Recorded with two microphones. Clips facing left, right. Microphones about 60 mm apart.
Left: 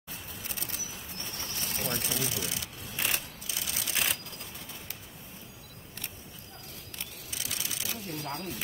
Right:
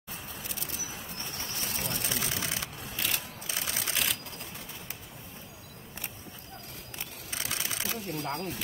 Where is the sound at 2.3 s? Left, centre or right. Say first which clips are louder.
Right 2 dB; right.